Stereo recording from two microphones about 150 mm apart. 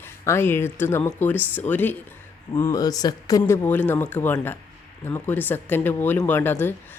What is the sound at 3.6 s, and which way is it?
Speech, 10° left (ahead or behind).